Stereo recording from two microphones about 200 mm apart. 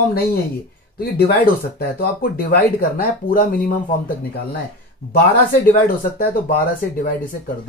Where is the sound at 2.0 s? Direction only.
45° left (ahead or behind).